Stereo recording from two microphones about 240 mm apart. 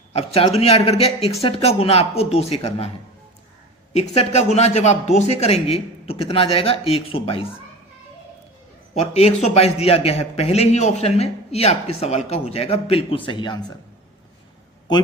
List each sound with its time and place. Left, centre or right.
0.1 s a man's voice: left
3.9 s a man's voice: left
9.0 s a man's voice: left